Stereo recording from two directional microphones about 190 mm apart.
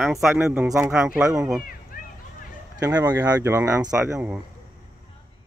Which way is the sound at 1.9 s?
45° left (ahead or behind).